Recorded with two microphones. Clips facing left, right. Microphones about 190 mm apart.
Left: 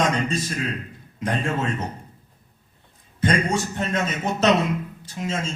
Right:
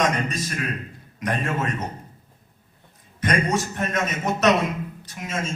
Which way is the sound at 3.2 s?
30° left (ahead or behind).